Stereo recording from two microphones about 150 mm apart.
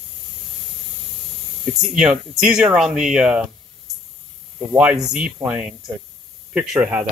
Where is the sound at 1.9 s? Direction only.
5° right (ahead or behind).